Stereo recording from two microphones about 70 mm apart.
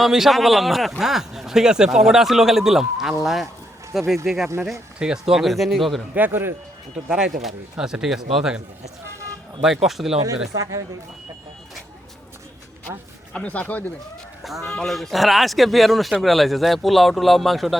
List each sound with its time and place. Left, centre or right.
0.0 s speech: centre
6.1 s a man's voice: right
7.1 s speech: centre
9.6 s speech: centre
10.2 s speech: right
13.3 s speech: centre
14.4 s speech: centre